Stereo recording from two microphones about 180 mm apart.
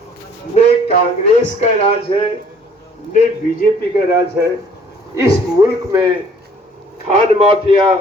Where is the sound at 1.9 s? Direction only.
30° left (ahead or behind).